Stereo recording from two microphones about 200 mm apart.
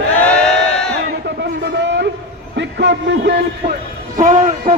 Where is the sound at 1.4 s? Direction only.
65° right (ahead or behind).